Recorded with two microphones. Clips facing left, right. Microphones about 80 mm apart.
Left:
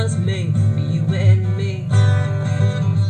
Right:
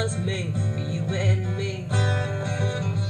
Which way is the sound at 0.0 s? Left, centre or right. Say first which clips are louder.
Left 4 dB; left.